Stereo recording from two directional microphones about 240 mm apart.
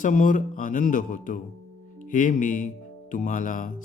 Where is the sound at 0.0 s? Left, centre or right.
Left.